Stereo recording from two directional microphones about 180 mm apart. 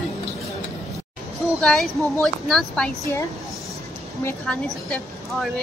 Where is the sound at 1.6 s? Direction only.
Centre (ahead or behind).